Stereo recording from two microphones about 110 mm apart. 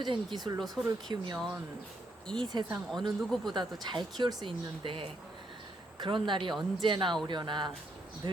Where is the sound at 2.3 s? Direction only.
35° right (ahead or behind).